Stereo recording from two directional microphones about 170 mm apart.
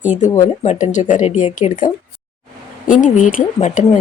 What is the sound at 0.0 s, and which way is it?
Speech, 45° left (ahead or behind).